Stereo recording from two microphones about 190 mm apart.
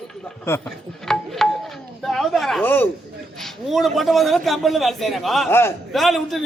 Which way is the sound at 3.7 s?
Centre (ahead or behind).